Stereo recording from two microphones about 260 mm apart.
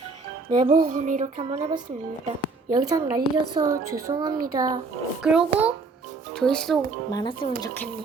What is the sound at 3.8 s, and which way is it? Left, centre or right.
Speech, right.